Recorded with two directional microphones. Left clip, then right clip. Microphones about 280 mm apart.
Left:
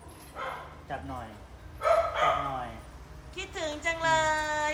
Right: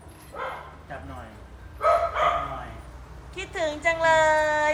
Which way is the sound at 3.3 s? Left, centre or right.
Centre.